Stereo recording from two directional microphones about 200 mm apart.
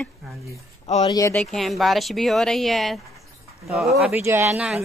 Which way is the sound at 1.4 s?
Centre (ahead or behind).